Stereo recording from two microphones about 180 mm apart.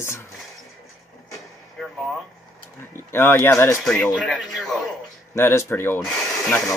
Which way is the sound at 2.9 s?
10° left (ahead or behind).